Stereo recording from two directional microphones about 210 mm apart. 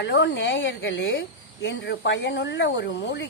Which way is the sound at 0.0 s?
55° left (ahead or behind).